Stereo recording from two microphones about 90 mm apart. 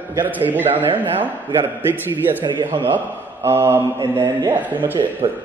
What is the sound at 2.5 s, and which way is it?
Speech, 60° right (ahead or behind).